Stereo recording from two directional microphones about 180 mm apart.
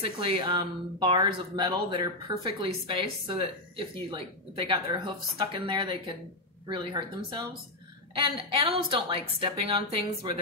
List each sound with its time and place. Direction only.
0.2 s speech: 25° right (ahead or behind)